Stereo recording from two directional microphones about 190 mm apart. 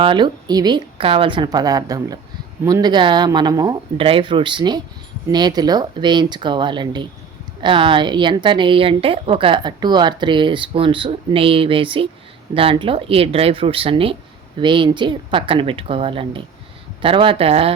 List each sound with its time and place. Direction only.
0.0 s a woman's voice: 25° right (ahead or behind)